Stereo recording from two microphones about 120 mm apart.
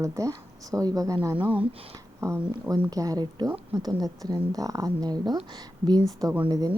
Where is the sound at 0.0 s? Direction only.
25° right (ahead or behind).